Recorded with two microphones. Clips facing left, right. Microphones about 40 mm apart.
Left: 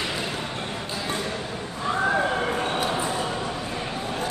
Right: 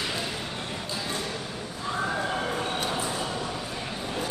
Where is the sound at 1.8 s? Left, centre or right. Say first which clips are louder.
Left 6 dB; left.